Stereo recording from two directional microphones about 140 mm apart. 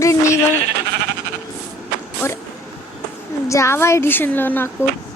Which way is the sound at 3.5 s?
20° left (ahead or behind).